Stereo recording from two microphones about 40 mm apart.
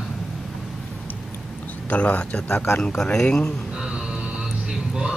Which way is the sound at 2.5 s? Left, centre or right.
Left.